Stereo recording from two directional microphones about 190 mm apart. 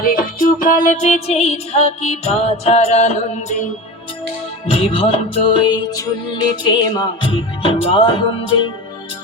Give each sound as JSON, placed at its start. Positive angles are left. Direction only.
{"t": 0.0, "sound": "music", "side_deg": 45}
{"t": 4.6, "sound": "music", "side_deg": 30}